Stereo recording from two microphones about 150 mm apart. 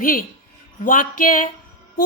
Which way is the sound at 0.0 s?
70° left (ahead or behind).